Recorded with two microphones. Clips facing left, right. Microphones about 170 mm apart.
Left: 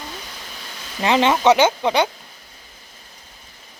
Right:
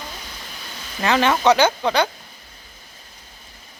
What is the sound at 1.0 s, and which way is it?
Speech, 20° left (ahead or behind).